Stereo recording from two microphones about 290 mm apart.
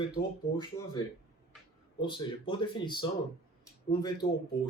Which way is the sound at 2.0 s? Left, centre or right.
Centre.